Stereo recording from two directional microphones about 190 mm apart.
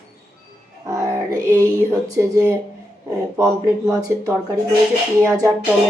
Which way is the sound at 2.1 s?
15° right (ahead or behind).